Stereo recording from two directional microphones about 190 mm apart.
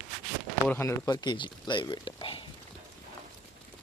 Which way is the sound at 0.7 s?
15° left (ahead or behind).